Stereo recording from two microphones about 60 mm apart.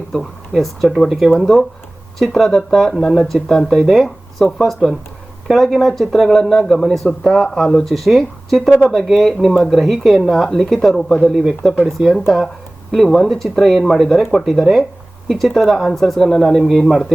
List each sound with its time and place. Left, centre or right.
0.1 s speech: centre